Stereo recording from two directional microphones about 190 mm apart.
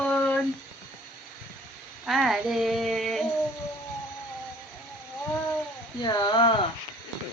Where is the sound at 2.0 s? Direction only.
Centre (ahead or behind).